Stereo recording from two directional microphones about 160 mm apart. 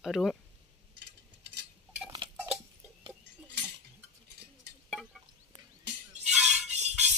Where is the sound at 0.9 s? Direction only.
90° right.